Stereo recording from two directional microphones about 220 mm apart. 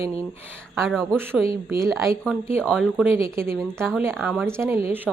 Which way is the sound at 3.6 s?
Centre (ahead or behind).